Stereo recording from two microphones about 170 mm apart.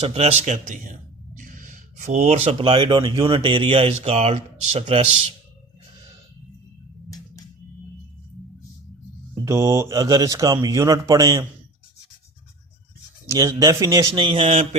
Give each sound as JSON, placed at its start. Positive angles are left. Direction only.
{"t": 0.0, "sound": "speech", "side_deg": -35}
{"t": 9.4, "sound": "speech", "side_deg": -15}
{"t": 13.4, "sound": "speech", "side_deg": -20}